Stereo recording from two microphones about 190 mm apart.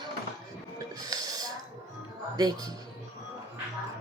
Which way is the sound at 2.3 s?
20° right (ahead or behind).